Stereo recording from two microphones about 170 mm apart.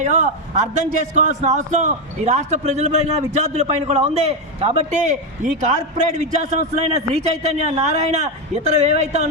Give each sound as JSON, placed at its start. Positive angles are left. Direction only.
{"t": 0.1, "sound": "a man's voice", "side_deg": -40}